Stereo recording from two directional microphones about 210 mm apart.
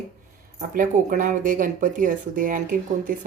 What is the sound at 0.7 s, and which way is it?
Speech, 40° right (ahead or behind).